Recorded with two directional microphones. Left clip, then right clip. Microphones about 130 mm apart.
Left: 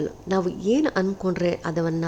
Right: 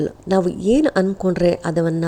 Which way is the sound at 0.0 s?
40° right (ahead or behind).